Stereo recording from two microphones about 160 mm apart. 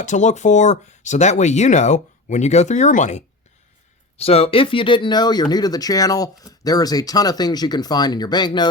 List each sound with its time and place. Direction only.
0.0 s speech: 50° left (ahead or behind); by 8.7 s 25° left (ahead or behind)